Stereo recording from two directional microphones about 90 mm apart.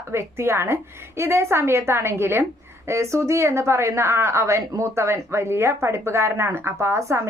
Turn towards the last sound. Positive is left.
turn(degrees=-30)  # may be behind; listen again after turning